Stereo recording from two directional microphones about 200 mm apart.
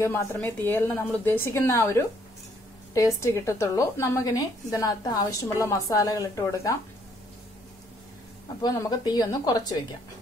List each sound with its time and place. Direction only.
0.0 s a woman's voice: 10° left (ahead or behind)
8.6 s speech: 20° left (ahead or behind)